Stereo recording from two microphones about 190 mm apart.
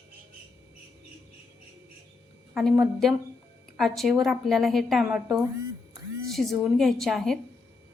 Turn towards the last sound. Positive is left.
turn(degrees=0)  # may be behind; listen again after turning